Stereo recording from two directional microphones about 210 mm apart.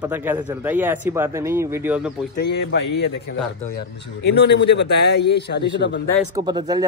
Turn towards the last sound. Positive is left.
turn(degrees=-20)  # may be behind; listen again after turning